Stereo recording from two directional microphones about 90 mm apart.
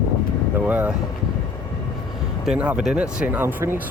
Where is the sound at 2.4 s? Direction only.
15° right (ahead or behind).